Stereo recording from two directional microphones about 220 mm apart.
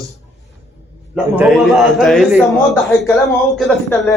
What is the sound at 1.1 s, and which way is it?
Speech, centre (ahead or behind).